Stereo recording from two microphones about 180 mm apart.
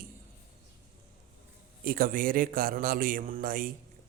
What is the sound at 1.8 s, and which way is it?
A man's voice, 55° right (ahead or behind).